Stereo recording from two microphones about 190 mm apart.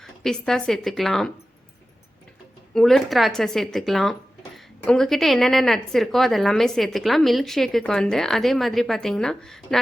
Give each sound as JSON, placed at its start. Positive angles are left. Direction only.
{"t": 0.0, "sound": "speech", "side_deg": 0}
{"t": 2.7, "sound": "speech", "side_deg": 0}